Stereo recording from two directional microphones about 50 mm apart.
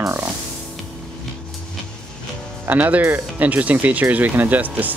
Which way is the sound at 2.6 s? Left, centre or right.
Right.